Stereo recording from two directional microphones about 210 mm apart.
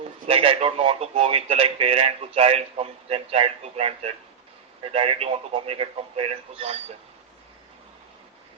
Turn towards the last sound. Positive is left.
turn(degrees=-30)  # may be behind; listen again after turning